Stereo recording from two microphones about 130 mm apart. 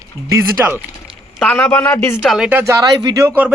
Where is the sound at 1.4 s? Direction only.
10° left (ahead or behind).